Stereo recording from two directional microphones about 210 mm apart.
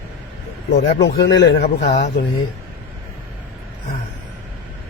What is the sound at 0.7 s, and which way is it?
Speech, 50° left (ahead or behind).